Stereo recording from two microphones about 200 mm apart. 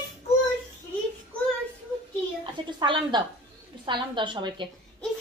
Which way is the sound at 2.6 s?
25° right (ahead or behind).